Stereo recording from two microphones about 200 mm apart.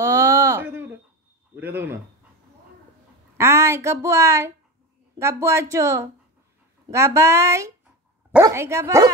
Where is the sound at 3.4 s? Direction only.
15° right (ahead or behind).